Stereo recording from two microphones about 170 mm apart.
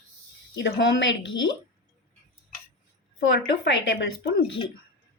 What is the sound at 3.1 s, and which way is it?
Speech, 90° left.